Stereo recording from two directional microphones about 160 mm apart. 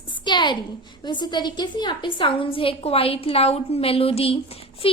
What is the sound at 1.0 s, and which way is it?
A woman's voice, 25° left (ahead or behind).